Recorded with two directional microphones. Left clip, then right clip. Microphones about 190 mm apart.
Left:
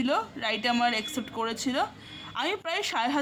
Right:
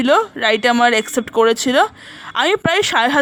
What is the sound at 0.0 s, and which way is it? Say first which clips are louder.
Speech: right 14 dB; 50° right (ahead or behind).